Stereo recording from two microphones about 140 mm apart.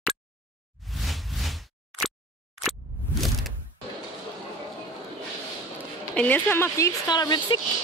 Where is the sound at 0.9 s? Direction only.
Centre (ahead or behind).